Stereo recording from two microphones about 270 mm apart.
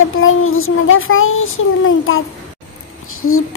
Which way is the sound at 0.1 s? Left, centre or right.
Left.